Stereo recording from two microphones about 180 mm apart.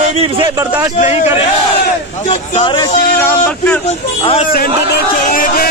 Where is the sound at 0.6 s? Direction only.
15° right (ahead or behind).